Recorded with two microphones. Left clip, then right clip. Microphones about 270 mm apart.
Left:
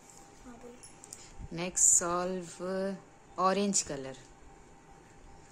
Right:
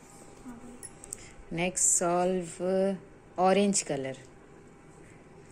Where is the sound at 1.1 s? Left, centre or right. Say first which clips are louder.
Right 6 dB; centre.